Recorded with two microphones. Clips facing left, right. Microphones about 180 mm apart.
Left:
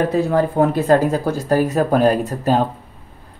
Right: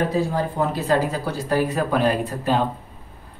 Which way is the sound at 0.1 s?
60° left (ahead or behind).